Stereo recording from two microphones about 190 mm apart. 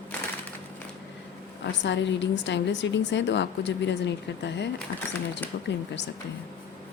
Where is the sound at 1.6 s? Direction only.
65° left (ahead or behind).